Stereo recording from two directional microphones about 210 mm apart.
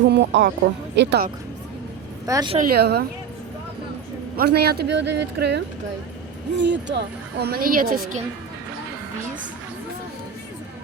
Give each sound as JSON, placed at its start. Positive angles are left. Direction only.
{"t": 0.1, "sound": "a woman's voice", "side_deg": -55}
{"t": 2.2, "sound": "speech", "side_deg": -20}
{"t": 2.6, "sound": "a woman's voice", "side_deg": -45}
{"t": 4.4, "sound": "a woman's voice", "side_deg": -50}